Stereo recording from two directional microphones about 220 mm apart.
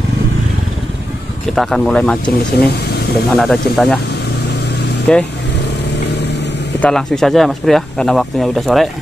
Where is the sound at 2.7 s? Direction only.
45° left (ahead or behind).